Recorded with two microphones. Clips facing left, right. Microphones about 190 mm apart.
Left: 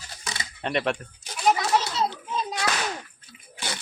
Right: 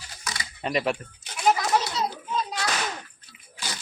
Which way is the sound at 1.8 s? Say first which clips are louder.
Left 1 dB; 25° left (ahead or behind).